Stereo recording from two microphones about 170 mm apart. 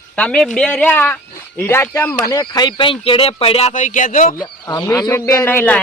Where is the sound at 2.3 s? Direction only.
25° left (ahead or behind); by 4.4 s 50° left (ahead or behind).